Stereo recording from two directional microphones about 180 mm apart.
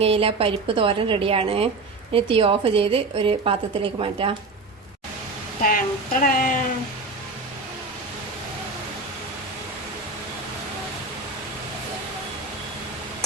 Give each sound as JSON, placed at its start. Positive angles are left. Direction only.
{"t": 0.0, "sound": "a woman's voice", "side_deg": -30}
{"t": 5.6, "sound": "speech", "side_deg": 50}